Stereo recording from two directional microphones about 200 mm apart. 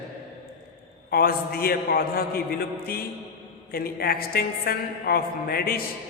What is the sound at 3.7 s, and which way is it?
A woman's voice, 50° left (ahead or behind).